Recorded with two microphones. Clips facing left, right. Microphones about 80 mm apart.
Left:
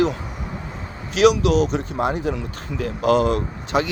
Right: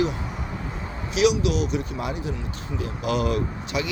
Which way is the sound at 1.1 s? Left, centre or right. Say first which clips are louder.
Left 5 dB; left.